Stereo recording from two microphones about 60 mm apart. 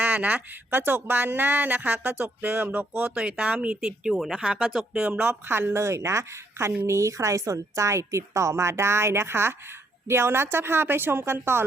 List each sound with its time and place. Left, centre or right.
0.0 s speech: right
3.2 s speech: centre
4.2 s speech: centre
4.9 s speech: centre
5.3 s a woman's voice: right